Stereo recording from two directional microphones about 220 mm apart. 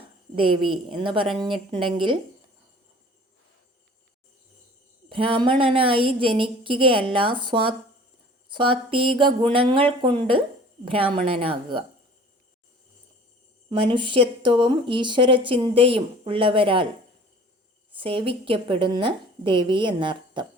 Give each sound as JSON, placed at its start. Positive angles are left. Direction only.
{"t": 0.3, "sound": "speech", "side_deg": -25}
{"t": 5.0, "sound": "speech", "side_deg": -25}
{"t": 13.9, "sound": "speech", "side_deg": -20}
{"t": 17.9, "sound": "speech", "side_deg": -25}